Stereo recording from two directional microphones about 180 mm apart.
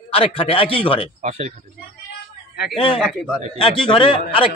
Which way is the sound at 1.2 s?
35° right (ahead or behind).